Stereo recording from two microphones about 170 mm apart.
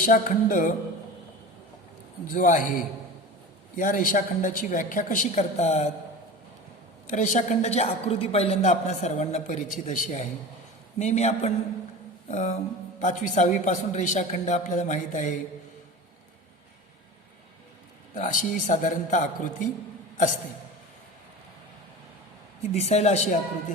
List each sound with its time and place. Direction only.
0.0 s speech: 50° left (ahead or behind)
2.3 s a man's voice: 55° left (ahead or behind)
7.1 s a woman's voice: 45° left (ahead or behind)
18.1 s speech: 50° left (ahead or behind)
22.7 s a woman's voice: 40° left (ahead or behind)